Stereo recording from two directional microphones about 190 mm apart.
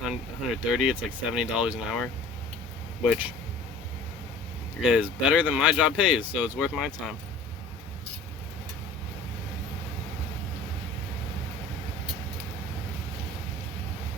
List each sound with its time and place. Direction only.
0.0 s speech: 5° right (ahead or behind)
4.8 s speech: 5° right (ahead or behind)